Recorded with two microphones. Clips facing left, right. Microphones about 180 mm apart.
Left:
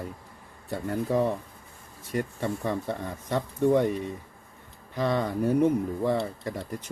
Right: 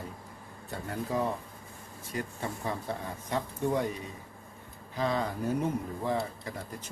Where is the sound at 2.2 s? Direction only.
65° left (ahead or behind).